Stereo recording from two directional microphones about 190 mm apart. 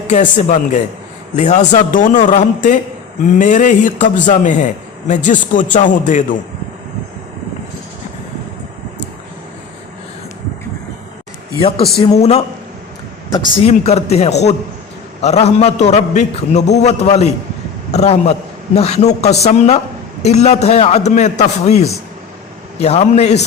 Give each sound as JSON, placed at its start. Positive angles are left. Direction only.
{"t": 0.1, "sound": "a man's voice", "side_deg": 40}
{"t": 11.9, "sound": "a man's voice", "side_deg": 30}
{"t": 13.7, "sound": "a man's voice", "side_deg": 35}